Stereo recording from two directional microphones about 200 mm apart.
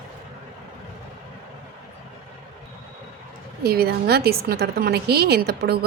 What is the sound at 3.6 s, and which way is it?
A woman's voice, 50° right (ahead or behind).